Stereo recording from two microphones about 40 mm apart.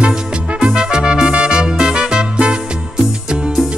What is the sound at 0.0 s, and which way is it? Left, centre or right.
Music, right.